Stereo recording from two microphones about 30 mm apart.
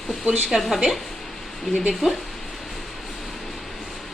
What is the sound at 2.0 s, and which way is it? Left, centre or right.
Speech, right.